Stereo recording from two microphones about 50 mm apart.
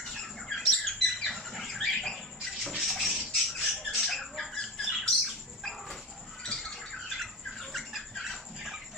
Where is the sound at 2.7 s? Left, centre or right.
Centre.